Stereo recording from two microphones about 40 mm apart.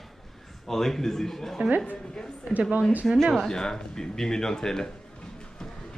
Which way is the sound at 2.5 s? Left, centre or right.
Right.